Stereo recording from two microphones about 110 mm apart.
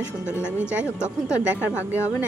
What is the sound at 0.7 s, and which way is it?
Speech, 10° right (ahead or behind).